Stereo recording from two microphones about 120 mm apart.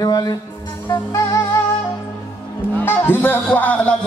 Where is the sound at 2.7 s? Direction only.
20° left (ahead or behind).